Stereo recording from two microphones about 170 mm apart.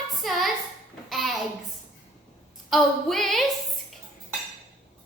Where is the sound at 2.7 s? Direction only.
Centre (ahead or behind).